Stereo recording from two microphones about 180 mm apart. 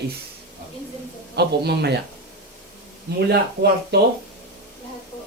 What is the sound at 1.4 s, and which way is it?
Speech, 65° right (ahead or behind).